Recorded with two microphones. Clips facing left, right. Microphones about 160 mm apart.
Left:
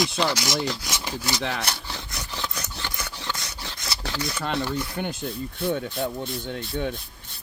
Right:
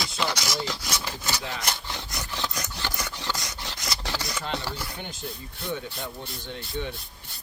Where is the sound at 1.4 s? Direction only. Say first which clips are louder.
Left 6 dB; 70° left (ahead or behind).